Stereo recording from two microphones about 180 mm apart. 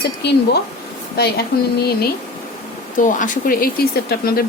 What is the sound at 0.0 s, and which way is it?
A woman's voice, 70° left (ahead or behind).